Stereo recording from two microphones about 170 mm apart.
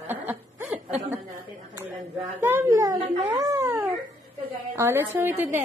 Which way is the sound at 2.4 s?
15° right (ahead or behind).